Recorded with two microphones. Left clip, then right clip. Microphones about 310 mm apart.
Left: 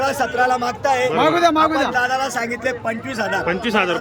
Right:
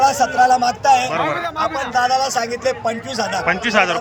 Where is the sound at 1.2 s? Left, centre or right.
Left.